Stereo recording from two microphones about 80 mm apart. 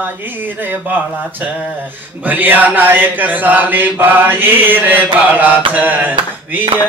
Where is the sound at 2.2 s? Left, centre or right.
Right.